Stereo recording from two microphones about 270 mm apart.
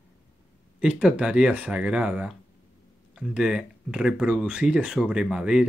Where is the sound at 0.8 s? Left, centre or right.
Centre.